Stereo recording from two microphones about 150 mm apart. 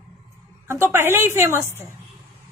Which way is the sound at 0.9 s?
15° right (ahead or behind).